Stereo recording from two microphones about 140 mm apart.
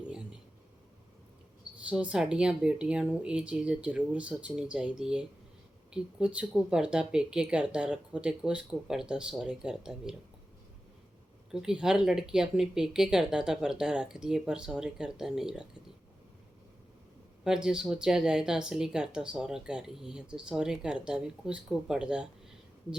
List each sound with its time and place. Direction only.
1.9 s speech: 10° right (ahead or behind)
11.5 s speech: 5° right (ahead or behind)
17.4 s speech: 5° right (ahead or behind)